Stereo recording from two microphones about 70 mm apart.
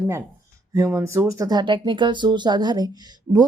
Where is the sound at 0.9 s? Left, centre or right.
Right.